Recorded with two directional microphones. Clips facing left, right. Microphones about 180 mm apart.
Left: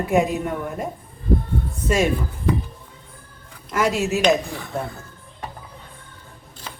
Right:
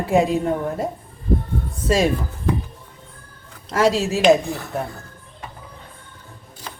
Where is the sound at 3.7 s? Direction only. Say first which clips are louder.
Right 3 dB; 30° right (ahead or behind).